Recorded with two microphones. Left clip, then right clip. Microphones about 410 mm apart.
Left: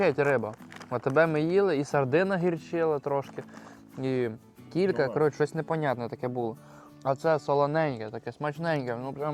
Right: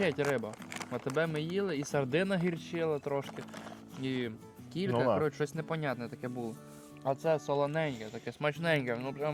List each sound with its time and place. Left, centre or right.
0.0 s speech: left
1.9 s speech: left
8.2 s speech: centre